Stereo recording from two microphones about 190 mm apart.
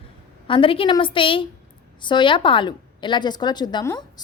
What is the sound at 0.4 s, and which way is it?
A woman's voice, 25° left (ahead or behind).